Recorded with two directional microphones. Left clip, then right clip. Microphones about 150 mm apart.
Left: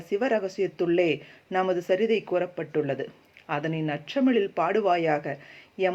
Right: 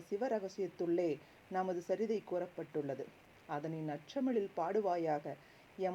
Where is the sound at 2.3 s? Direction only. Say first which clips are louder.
Left 13 dB; 30° right (ahead or behind).